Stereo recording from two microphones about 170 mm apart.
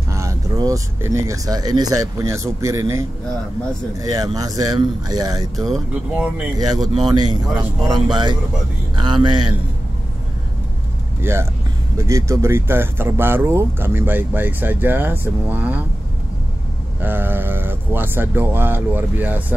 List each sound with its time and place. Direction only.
0.1 s speech: 20° right (ahead or behind)
5.6 s speech: 5° right (ahead or behind)
7.1 s speech: 25° right (ahead or behind)
11.1 s speech: 15° right (ahead or behind)
17.0 s speech: 10° right (ahead or behind)